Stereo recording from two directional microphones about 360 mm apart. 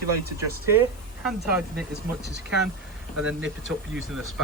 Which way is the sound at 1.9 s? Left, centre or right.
Right.